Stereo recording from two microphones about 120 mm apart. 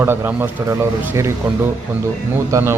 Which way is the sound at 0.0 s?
15° right (ahead or behind).